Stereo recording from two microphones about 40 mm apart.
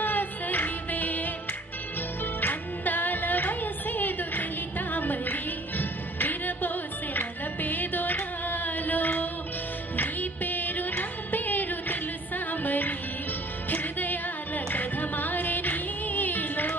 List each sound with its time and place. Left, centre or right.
0.0 s music: left
2.4 s music: left